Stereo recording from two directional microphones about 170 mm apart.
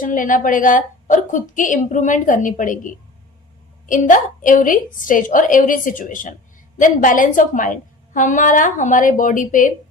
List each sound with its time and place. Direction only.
0.0 s a woman's voice: 50° left (ahead or behind)